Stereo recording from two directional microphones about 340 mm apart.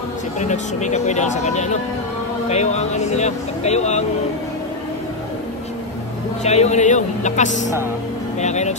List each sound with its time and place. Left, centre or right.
0.4 s speech: left
6.4 s speech: centre